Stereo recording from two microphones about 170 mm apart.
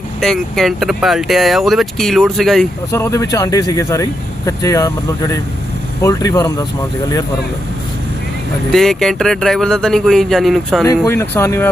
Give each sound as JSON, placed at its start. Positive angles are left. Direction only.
{"t": 0.2, "sound": "speech", "side_deg": 0}
{"t": 2.9, "sound": "speech", "side_deg": 15}
{"t": 8.7, "sound": "speech", "side_deg": 0}
{"t": 10.8, "sound": "speech", "side_deg": 15}